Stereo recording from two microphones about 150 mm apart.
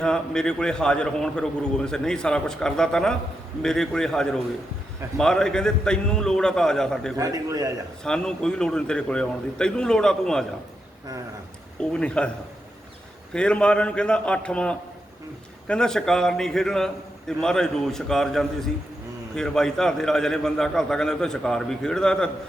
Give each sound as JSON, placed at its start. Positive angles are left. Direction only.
{"t": 0.0, "sound": "a man's voice", "side_deg": 5}
{"t": 7.2, "sound": "a man's voice", "side_deg": -20}
{"t": 8.0, "sound": "a man's voice", "side_deg": 5}
{"t": 11.8, "sound": "a man's voice", "side_deg": 5}
{"t": 13.3, "sound": "a man's voice", "side_deg": 5}